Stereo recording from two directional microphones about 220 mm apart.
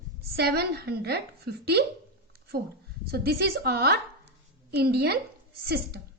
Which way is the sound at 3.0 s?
45° right (ahead or behind).